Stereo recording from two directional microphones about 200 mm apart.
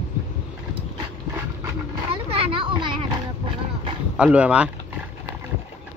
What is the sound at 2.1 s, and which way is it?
Children playing, 25° right (ahead or behind).